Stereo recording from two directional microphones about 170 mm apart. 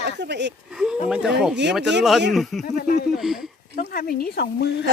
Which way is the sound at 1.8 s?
90° right.